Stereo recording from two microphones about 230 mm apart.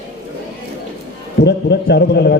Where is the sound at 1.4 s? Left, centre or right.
Left.